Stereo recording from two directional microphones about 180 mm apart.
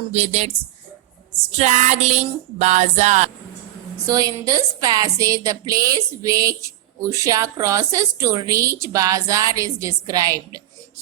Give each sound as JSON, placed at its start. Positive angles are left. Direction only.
{"t": 0.1, "sound": "music", "side_deg": -35}
{"t": 1.5, "sound": "music", "side_deg": -40}
{"t": 4.0, "sound": "a woman's voice", "side_deg": -20}